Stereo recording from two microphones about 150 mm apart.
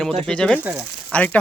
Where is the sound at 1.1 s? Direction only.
10° left (ahead or behind).